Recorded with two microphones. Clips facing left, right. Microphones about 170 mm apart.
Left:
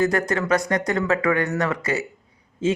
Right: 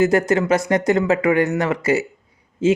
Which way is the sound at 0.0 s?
25° right (ahead or behind).